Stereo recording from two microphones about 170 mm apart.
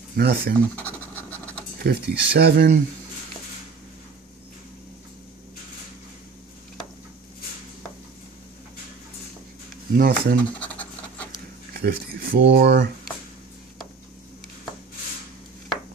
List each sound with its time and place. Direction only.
0.1 s speech: 70° right (ahead or behind)
0.7 s scratch: 10° left (ahead or behind)
1.8 s speech: 70° right (ahead or behind)
9.9 s speech: 60° right (ahead or behind)
10.6 s pant: 10° left (ahead or behind)
11.7 s speech: 65° right (ahead or behind); by 12.8 s 90° right